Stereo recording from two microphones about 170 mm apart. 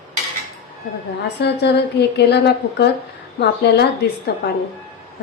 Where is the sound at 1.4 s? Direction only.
75° left (ahead or behind).